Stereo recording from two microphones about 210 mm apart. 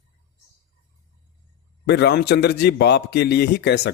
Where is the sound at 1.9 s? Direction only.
50° left (ahead or behind).